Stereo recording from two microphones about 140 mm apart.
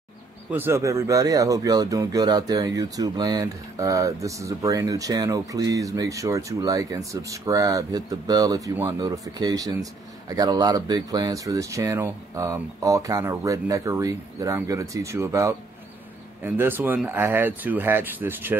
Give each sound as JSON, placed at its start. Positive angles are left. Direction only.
{"t": 0.5, "sound": "speech", "side_deg": -15}